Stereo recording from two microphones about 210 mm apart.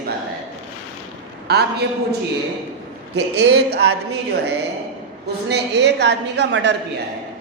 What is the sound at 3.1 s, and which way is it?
Speech, 55° right (ahead or behind).